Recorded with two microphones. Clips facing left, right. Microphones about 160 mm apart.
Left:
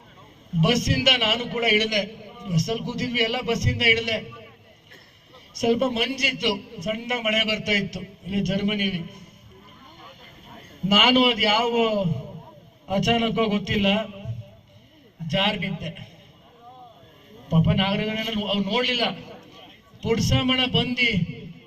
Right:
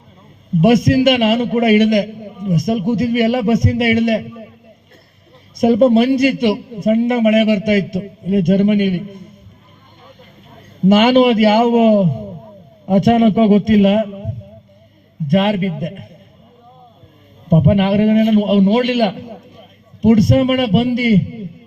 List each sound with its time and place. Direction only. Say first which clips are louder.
0.6 s a man's voice: right 11 dB; 55° right (ahead or behind)
5.5 s a man's voice: right 11 dB; 55° right (ahead or behind)
11.0 s a man's voice: right 8 dB; 55° right (ahead or behind)
15.3 s a man's voice: right 10 dB; 55° right (ahead or behind)
17.5 s a man's voice: right 9 dB; 55° right (ahead or behind)